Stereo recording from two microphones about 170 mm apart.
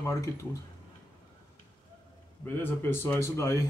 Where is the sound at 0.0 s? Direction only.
20° left (ahead or behind).